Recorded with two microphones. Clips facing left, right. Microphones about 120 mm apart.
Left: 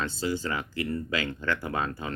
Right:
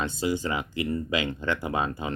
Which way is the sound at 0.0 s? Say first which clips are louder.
Right 2 dB; 15° right (ahead or behind).